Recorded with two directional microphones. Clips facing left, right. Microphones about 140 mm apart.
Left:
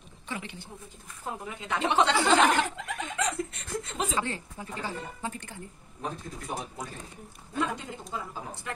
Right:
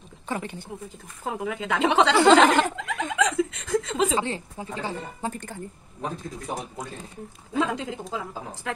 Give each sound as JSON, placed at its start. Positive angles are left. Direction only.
{"t": 0.3, "sound": "a woman's voice", "side_deg": -45}
{"t": 1.2, "sound": "a woman's voice", "side_deg": -90}
{"t": 4.1, "sound": "speech", "side_deg": -25}
{"t": 7.5, "sound": "a woman's voice", "side_deg": -90}